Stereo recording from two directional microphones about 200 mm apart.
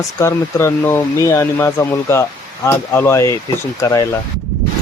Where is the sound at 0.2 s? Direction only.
15° left (ahead or behind).